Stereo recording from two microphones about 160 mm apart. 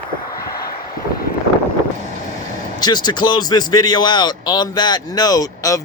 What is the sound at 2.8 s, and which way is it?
Speech, 25° left (ahead or behind).